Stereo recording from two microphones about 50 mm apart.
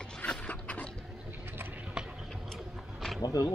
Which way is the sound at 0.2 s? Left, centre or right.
Left.